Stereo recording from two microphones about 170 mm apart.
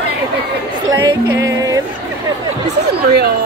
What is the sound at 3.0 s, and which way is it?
Speech, 70° right (ahead or behind).